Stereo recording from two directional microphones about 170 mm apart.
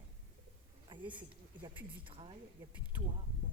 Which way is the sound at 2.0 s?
30° right (ahead or behind).